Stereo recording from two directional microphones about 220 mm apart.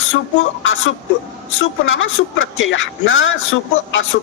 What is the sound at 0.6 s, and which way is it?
Speech, 60° left (ahead or behind).